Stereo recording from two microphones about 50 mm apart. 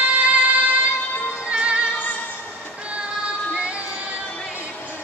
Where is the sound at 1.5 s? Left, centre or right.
Right.